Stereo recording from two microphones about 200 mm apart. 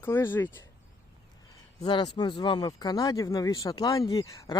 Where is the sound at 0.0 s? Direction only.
10° left (ahead or behind).